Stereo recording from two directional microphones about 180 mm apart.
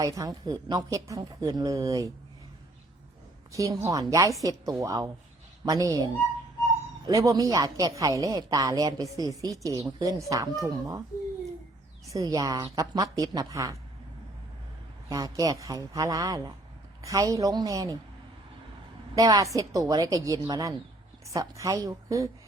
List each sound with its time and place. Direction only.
0.0 s speech: 20° right (ahead or behind)
3.5 s speech: 15° right (ahead or behind)
7.1 s speech: 20° right (ahead or behind)
12.1 s speech: 20° right (ahead or behind)
15.1 s speech: 20° right (ahead or behind)
19.1 s speech: 20° right (ahead or behind)